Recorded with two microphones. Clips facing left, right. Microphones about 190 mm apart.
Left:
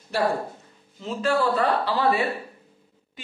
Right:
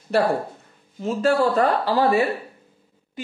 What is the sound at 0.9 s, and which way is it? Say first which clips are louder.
A man's voice: right 4 dB; 45° right (ahead or behind).